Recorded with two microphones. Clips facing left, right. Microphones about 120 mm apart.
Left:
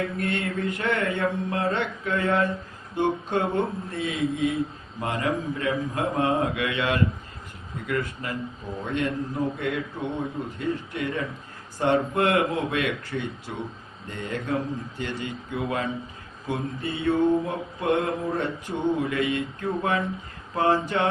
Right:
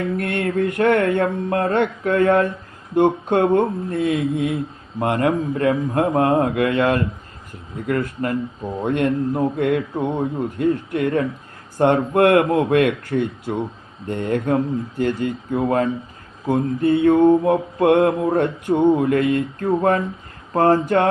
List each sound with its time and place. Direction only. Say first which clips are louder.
0.2 s a man's voice: right 7 dB; 55° right (ahead or behind)
2.9 s mantra: right 8 dB; 55° right (ahead or behind)
8.8 s a man's voice: right 8 dB; 55° right (ahead or behind)
14.1 s mantra: right 9 dB; 55° right (ahead or behind)